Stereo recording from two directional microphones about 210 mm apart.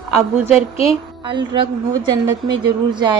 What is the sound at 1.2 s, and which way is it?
A woman's voice, 25° right (ahead or behind).